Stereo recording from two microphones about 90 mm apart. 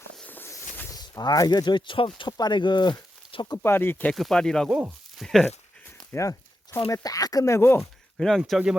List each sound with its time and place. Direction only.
0.3 s walk: 20° left (ahead or behind)
0.9 s speech: 45° left (ahead or behind)
3.6 s speech: 25° left (ahead or behind)
4.1 s speech: centre (ahead or behind)
6.1 s a sound: 30° left (ahead or behind)
6.9 s speech: 40° left (ahead or behind); by 7.9 s 25° left (ahead or behind)
8.4 s speech: 5° right (ahead or behind)